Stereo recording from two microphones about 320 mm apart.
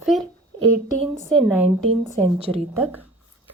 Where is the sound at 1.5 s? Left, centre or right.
Centre.